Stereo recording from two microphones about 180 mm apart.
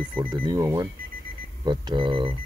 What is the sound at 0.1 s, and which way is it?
Speech, 25° right (ahead or behind).